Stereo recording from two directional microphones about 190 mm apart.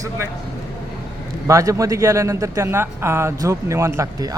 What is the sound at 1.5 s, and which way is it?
A man's voice, 15° right (ahead or behind).